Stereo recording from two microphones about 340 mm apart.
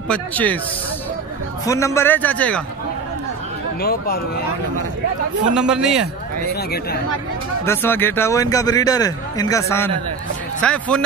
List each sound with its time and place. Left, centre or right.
0.1 s a man's voice: centre
1.7 s a man's voice: centre
3.8 s speech: left
5.5 s a man's voice: centre
6.4 s speech: left
7.6 s a man's voice: centre